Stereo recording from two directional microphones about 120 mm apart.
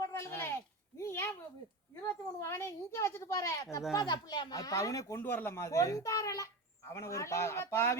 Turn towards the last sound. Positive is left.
turn(degrees=20)  # may be behind; listen again after turning